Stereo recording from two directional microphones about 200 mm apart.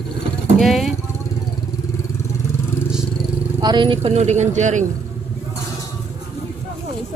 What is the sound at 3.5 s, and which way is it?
Speech, 20° right (ahead or behind).